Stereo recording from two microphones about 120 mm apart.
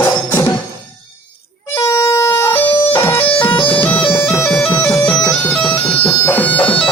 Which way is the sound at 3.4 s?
45° left (ahead or behind).